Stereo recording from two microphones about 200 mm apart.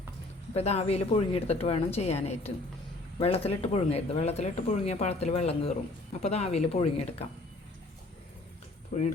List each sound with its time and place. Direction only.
0.5 s speech: 30° left (ahead or behind)
8.9 s speech: 35° left (ahead or behind)